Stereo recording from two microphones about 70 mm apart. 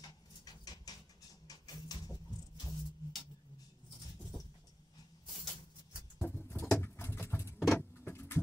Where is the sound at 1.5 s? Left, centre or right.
Left.